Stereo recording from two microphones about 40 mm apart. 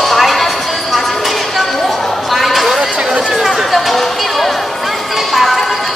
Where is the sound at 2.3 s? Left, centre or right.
Centre.